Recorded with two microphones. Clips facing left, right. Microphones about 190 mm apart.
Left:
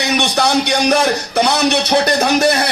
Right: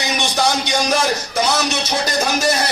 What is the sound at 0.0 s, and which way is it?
A man's voice, 65° left (ahead or behind).